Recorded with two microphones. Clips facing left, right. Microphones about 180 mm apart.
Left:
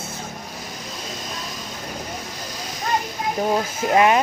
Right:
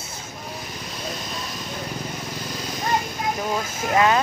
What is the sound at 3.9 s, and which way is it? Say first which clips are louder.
Speech: left 2 dB; 20° left (ahead or behind).